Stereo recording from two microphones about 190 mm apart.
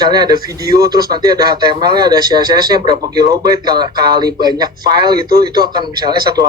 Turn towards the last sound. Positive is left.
turn(degrees=-20)  # may be behind; listen again after turning